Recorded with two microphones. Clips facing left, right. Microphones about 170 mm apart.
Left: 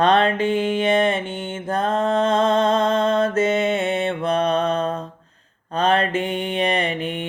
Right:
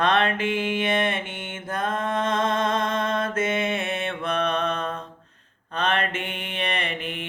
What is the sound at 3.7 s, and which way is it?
Mantra, 30° left (ahead or behind).